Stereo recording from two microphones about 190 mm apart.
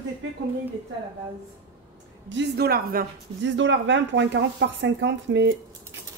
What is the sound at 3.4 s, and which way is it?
Speech, 75° right (ahead or behind).